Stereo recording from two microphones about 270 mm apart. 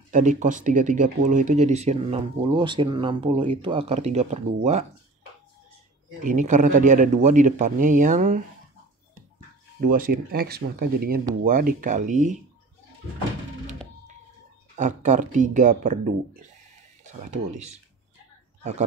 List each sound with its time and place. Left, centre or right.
0.1 s speech: right
6.2 s speech: right
9.8 s speech: right
14.8 s speech: right
17.3 s speech: right